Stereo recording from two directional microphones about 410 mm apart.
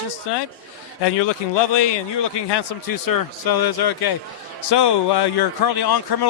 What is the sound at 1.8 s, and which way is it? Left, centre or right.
A man's voice, left.